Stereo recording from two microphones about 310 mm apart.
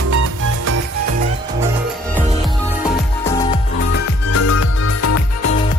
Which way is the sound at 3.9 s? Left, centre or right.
Left.